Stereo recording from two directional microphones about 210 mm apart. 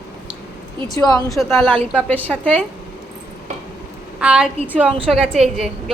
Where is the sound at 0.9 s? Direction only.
15° left (ahead or behind).